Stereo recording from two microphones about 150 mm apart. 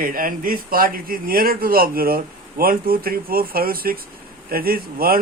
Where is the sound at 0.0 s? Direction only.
70° right (ahead or behind).